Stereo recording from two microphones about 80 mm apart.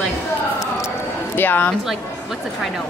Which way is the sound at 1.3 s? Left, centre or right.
Left.